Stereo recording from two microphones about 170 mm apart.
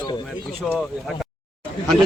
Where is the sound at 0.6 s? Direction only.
Centre (ahead or behind).